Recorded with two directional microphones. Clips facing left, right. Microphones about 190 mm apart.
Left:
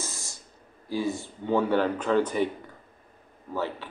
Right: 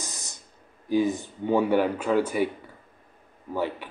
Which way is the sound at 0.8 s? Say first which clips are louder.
Right 5 dB; 20° right (ahead or behind).